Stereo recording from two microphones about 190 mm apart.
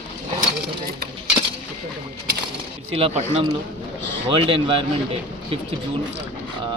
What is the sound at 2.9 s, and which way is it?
Speech, 30° right (ahead or behind).